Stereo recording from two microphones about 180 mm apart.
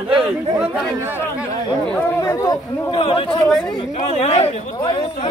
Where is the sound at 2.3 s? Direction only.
25° left (ahead or behind).